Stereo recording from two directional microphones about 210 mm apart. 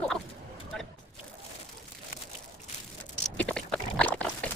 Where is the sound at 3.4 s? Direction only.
5° left (ahead or behind).